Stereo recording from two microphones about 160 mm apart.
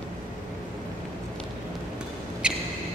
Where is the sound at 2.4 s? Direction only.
5° right (ahead or behind).